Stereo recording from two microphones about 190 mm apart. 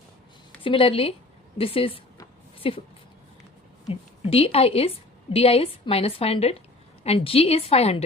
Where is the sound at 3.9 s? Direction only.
30° left (ahead or behind).